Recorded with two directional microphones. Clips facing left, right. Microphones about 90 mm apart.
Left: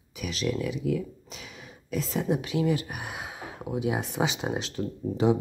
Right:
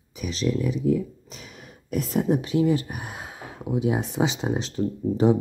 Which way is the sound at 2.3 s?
35° right (ahead or behind).